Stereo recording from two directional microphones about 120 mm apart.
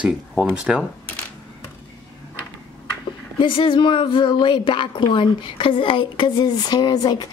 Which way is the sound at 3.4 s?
45° left (ahead or behind).